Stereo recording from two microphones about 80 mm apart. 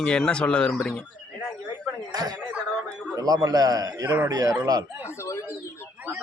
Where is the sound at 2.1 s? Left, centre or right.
Right.